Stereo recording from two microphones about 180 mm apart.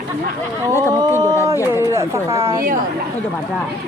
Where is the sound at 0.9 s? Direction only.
20° right (ahead or behind).